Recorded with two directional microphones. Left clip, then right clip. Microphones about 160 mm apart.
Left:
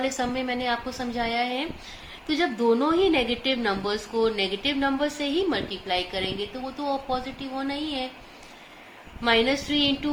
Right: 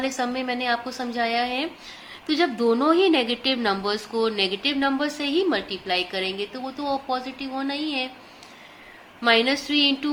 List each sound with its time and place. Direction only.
0.0 s a woman's voice: 35° right (ahead or behind)
9.2 s a woman's voice: 40° right (ahead or behind)